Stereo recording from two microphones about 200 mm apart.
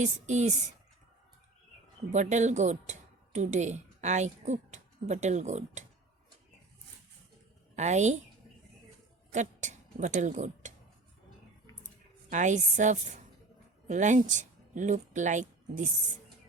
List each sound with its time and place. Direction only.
0.0 s a woman's voice: 35° right (ahead or behind)
2.1 s a woman's voice: 35° right (ahead or behind)
7.8 s a woman's voice: 35° right (ahead or behind)
9.3 s speech: 35° right (ahead or behind)
12.3 s a woman's voice: 40° right (ahead or behind)